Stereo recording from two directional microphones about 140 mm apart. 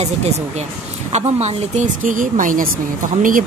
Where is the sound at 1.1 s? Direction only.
55° right (ahead or behind).